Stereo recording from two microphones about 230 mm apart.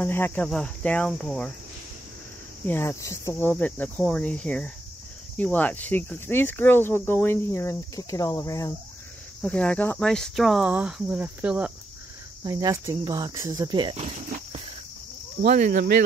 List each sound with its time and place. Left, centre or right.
0.0 s speech: centre
2.6 s cricket: centre
9.4 s speech: centre; by 14.6 s right
15.4 s cricket: right